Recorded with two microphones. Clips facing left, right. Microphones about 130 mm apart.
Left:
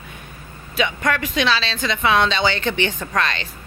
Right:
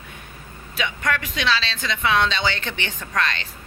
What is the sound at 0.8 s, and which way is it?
Speech, 30° left (ahead or behind).